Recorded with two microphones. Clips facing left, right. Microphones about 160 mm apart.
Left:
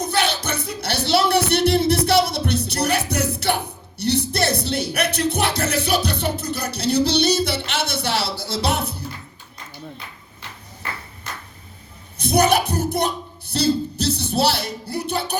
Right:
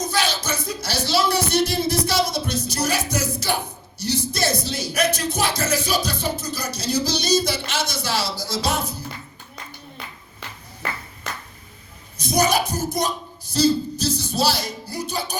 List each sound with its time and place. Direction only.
0.0 s speech: 60° left (ahead or behind)
12.1 s speech: 60° left (ahead or behind)